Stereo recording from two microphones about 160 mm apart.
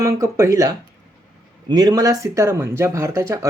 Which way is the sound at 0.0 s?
20° right (ahead or behind).